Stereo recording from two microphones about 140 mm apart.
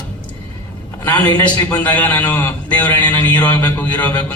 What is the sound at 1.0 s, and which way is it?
A man's voice, 10° left (ahead or behind).